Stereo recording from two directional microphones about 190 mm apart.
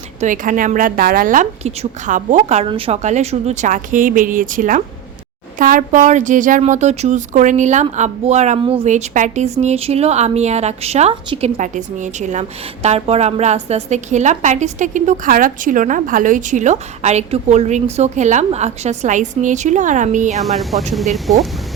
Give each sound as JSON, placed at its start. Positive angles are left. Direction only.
{"t": 0.2, "sound": "a woman's voice", "side_deg": -45}
{"t": 20.4, "sound": "speech", "side_deg": 0}